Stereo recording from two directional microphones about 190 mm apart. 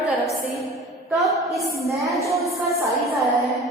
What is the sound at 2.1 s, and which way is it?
Music, centre (ahead or behind).